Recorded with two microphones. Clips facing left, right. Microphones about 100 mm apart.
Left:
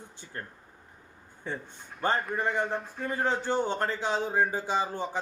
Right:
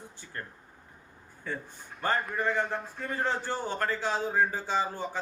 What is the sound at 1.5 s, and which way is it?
Speech, 25° left (ahead or behind).